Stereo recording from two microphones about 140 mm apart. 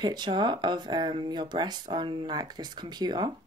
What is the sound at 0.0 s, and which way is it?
Speech, 30° right (ahead or behind).